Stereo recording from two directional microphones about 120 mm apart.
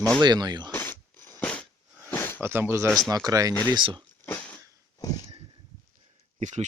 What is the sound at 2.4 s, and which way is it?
Speech, 20° right (ahead or behind).